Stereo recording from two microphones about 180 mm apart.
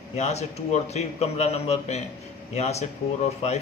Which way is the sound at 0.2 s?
40° left (ahead or behind).